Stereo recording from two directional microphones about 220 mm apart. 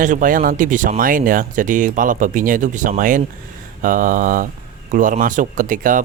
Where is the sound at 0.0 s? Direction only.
35° right (ahead or behind).